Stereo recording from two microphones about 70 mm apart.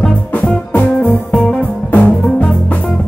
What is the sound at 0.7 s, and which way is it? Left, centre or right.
Music, left.